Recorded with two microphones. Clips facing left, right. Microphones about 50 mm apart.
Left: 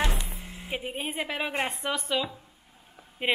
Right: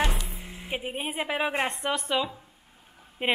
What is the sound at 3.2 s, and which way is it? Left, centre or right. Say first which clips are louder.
Speech: right 1 dB; centre.